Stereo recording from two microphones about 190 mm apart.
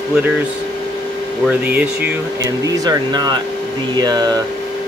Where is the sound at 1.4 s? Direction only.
10° right (ahead or behind).